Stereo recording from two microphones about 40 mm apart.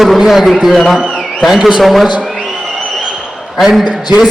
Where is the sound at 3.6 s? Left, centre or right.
Centre.